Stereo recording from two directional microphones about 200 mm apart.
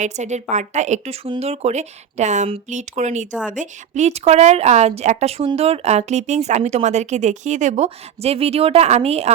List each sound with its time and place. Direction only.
0.0 s a woman's voice: 35° right (ahead or behind)